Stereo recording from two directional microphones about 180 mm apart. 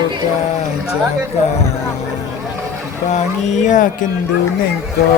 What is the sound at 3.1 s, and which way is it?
Speech, 40° left (ahead or behind).